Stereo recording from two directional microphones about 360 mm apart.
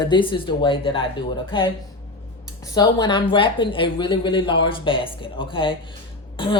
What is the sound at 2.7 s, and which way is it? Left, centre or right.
Speech, centre.